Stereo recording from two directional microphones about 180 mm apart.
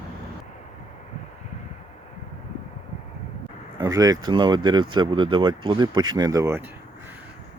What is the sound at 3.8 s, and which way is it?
Speech, 20° right (ahead or behind).